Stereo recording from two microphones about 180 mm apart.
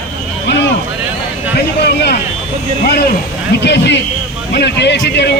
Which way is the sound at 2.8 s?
60° left (ahead or behind).